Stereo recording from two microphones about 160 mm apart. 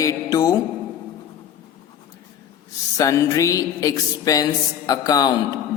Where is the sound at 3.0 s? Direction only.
20° left (ahead or behind).